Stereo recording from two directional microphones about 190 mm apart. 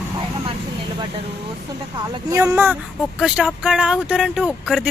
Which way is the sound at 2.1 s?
15° right (ahead or behind).